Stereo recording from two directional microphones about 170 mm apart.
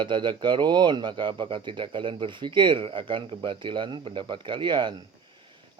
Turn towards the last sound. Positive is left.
turn(degrees=-25)  # may be behind; listen again after turning